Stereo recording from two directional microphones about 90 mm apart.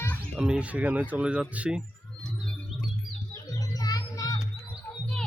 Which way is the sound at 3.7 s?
45° left (ahead or behind).